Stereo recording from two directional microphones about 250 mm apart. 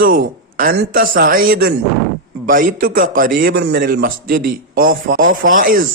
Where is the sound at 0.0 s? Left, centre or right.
Right.